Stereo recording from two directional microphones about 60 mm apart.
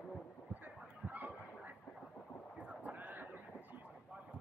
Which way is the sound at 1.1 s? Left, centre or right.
Right.